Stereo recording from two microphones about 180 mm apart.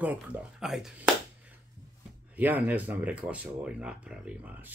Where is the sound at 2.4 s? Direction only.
10° right (ahead or behind).